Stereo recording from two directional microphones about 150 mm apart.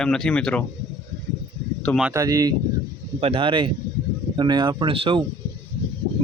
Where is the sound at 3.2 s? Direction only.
35° right (ahead or behind).